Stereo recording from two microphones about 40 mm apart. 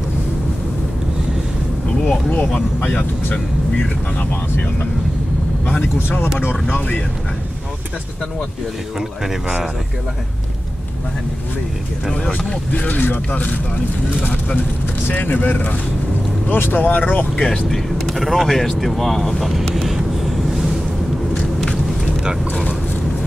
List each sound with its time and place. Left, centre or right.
2.0 s speech: left
9.2 s speech: centre
12.7 s speech: left
16.4 s speech: left
16.8 s speech: left
17.6 s speech: centre
19.9 s wind noise: centre